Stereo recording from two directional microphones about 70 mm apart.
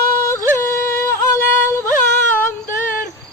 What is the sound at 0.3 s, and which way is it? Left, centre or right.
Music, left.